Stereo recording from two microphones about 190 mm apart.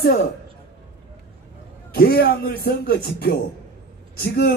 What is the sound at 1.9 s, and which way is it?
Speech, 55° left (ahead or behind).